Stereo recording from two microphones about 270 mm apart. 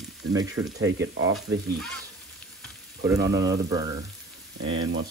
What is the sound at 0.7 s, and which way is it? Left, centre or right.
Speech, right.